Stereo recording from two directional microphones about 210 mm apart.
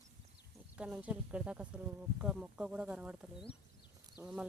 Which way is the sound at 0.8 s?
5° right (ahead or behind).